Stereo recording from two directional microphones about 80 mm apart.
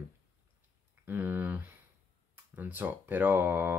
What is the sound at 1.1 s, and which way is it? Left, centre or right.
Speech, right.